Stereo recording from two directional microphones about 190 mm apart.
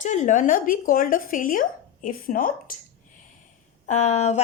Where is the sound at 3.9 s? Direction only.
35° left (ahead or behind).